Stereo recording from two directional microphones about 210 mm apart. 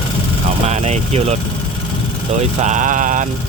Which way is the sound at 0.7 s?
30° right (ahead or behind).